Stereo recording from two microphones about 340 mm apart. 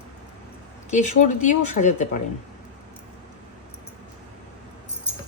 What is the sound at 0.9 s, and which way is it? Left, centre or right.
Speech, left.